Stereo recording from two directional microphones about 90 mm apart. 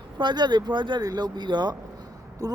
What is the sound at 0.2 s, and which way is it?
Speech, 55° right (ahead or behind).